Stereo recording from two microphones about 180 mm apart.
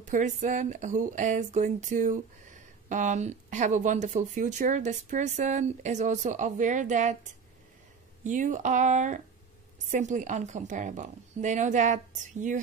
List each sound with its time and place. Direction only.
0.0 s speech: 45° right (ahead or behind)
8.2 s speech: 45° right (ahead or behind)